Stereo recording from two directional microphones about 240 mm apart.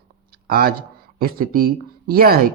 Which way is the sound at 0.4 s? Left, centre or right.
Right.